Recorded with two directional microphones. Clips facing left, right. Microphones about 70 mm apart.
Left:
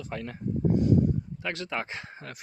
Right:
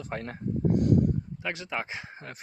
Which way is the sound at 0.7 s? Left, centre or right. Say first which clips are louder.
Even; right.